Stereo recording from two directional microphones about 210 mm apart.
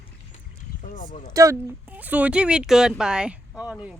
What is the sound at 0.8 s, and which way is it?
Speech, 40° left (ahead or behind).